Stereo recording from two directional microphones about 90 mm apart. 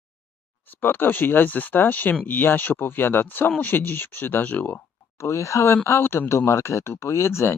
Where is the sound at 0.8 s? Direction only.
25° left (ahead or behind).